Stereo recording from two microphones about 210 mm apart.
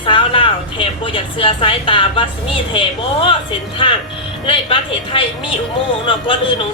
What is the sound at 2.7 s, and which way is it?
A woman's voice, 25° left (ahead or behind).